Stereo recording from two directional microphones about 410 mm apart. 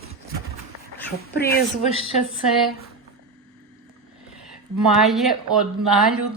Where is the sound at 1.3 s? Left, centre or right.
Left.